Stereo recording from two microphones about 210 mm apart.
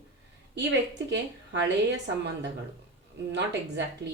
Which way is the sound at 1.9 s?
55° right (ahead or behind).